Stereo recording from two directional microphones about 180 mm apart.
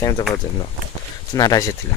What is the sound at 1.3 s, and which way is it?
Speech, 20° left (ahead or behind).